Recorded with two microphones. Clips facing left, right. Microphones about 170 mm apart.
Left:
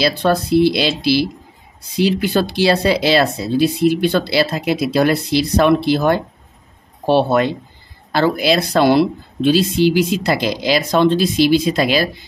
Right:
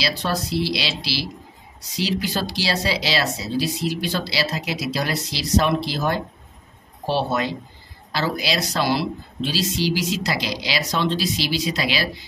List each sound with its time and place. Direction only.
0.0 s speech: 55° left (ahead or behind)